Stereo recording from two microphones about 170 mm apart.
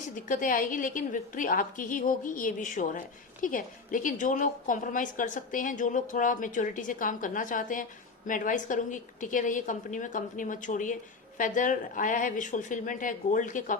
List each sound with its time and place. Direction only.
0.3 s a woman's voice: 50° left (ahead or behind)